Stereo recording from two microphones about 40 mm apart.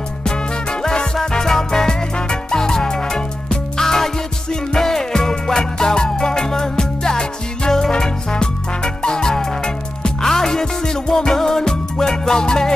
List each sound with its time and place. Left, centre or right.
0.2 s music: centre